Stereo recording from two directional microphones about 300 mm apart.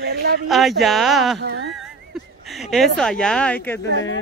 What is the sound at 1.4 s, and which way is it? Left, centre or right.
Speech, right.